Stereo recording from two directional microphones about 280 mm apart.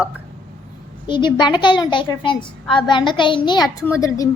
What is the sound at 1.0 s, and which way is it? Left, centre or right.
A child's voice, centre.